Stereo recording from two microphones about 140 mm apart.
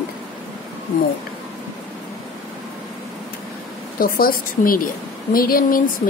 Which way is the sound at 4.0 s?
90° left.